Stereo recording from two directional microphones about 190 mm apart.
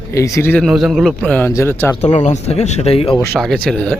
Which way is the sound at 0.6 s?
Centre (ahead or behind).